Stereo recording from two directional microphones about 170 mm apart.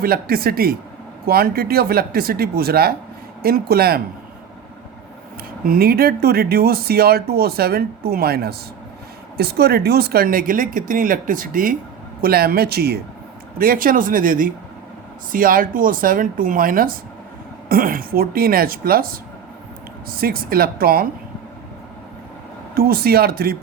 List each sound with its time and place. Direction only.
0.0 s speech: 60° right (ahead or behind)
5.6 s speech: 60° right (ahead or behind)
13.6 s speech: 55° right (ahead or behind)
22.7 s speech: 65° right (ahead or behind)